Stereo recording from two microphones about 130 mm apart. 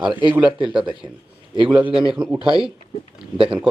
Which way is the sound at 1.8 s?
5° right (ahead or behind).